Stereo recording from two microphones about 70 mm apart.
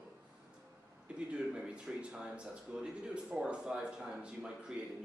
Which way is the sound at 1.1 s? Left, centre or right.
Centre.